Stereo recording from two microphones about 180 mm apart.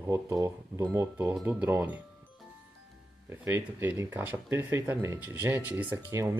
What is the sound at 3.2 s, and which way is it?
Speech, 10° right (ahead or behind).